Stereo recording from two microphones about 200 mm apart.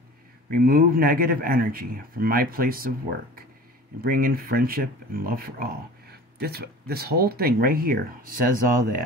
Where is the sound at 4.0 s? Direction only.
45° right (ahead or behind).